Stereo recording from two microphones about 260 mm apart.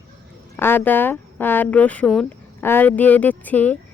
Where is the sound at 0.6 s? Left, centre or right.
Centre.